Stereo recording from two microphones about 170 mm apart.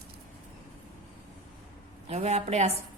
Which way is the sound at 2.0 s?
40° right (ahead or behind).